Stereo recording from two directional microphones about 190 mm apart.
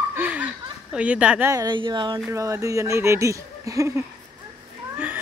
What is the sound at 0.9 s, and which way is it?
Speech, 5° right (ahead or behind).